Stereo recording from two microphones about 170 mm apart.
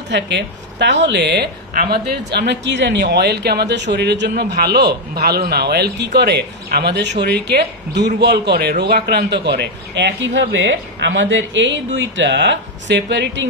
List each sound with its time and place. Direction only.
0.1 s a woman's voice: 90° right